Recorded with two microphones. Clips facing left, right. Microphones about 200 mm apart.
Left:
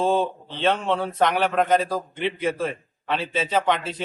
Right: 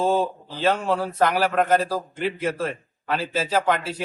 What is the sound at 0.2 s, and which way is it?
Speech, 30° left (ahead or behind).